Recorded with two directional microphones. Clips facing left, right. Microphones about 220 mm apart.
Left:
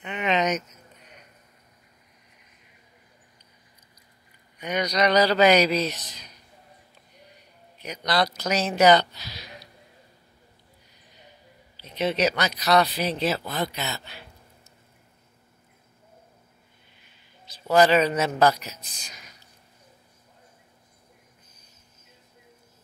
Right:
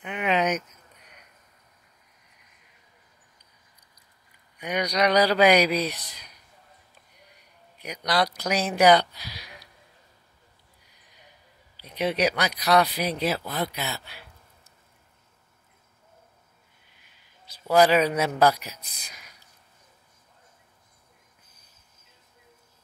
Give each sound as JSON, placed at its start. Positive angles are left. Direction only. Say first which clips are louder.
{"t": 0.0, "sound": "a sound", "louder": "even", "side_deg": -10}
{"t": 4.6, "sound": "speech", "louder": "left 1 dB", "side_deg": -10}
{"t": 7.8, "sound": "speech", "louder": "even", "side_deg": -10}
{"t": 11.8, "sound": "speech", "louder": "left 1 dB", "side_deg": -10}
{"t": 17.6, "sound": "speech", "louder": "even", "side_deg": -10}
{"t": 19.1, "sound": "a sound", "louder": "left 2 dB", "side_deg": -10}